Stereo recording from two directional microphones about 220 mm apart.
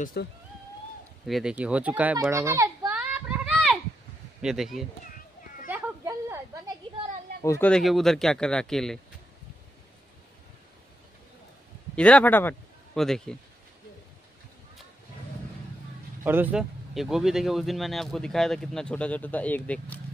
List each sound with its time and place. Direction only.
0.0 s speech: 45° left (ahead or behind)
1.2 s children playing: centre (ahead or behind)
4.4 s speech: centre (ahead or behind)
5.7 s a sound: 10° right (ahead or behind)
7.4 s speech: 10° left (ahead or behind)
11.9 s a man's voice: 5° left (ahead or behind)
16.3 s speech: 10° right (ahead or behind)